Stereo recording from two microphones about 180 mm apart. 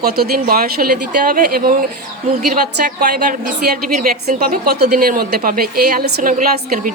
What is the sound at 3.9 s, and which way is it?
A woman's voice, 45° right (ahead or behind).